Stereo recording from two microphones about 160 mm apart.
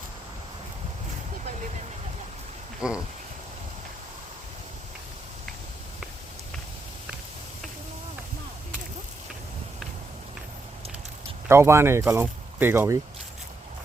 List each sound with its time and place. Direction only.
2.8 s speech: 5° right (ahead or behind)
11.4 s speech: 15° right (ahead or behind)